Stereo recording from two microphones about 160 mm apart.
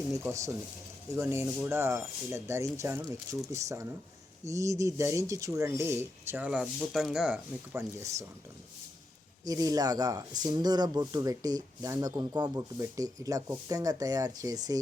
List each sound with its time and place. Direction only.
0.1 s speech: 20° right (ahead or behind)
9.4 s speech: 20° right (ahead or behind)